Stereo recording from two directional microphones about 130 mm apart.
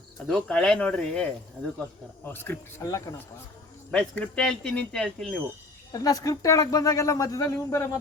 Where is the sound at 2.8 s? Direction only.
30° left (ahead or behind).